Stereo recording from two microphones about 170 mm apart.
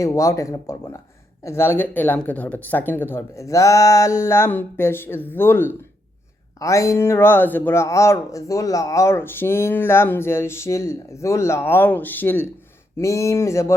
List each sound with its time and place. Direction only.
0.0 s speech: 15° left (ahead or behind)